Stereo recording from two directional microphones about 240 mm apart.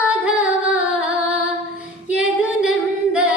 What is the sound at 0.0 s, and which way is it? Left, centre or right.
Female singing, centre.